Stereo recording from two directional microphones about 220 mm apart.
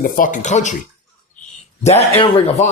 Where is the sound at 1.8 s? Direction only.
30° left (ahead or behind).